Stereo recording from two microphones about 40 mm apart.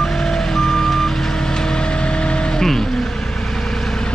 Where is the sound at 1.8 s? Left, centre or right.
Left.